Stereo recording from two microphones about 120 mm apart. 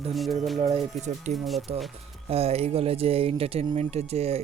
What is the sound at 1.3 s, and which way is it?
Speech, centre (ahead or behind).